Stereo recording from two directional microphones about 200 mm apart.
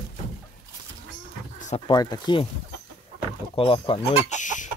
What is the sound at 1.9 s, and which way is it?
Speech, 20° left (ahead or behind).